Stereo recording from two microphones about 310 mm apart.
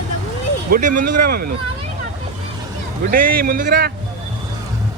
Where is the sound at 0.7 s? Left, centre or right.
Right.